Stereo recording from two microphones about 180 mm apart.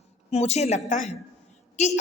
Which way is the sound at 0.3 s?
35° left (ahead or behind).